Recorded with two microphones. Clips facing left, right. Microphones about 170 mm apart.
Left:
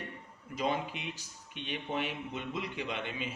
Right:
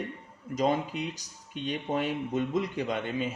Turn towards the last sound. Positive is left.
turn(degrees=-45)  # may be behind; listen again after turning